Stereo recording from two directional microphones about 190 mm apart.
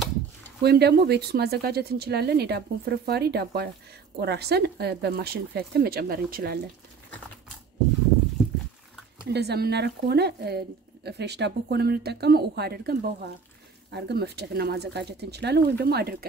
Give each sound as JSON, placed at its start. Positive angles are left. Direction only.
{"t": 0.6, "sound": "speech", "side_deg": -60}
{"t": 9.3, "sound": "speech", "side_deg": -60}